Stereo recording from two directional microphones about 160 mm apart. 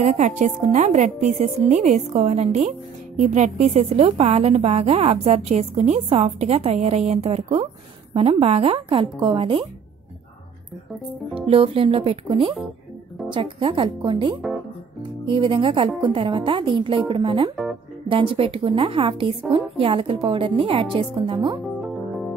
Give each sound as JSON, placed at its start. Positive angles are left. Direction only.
{"t": 0.0, "sound": "a woman's voice", "side_deg": -50}
{"t": 11.3, "sound": "a woman's voice", "side_deg": -35}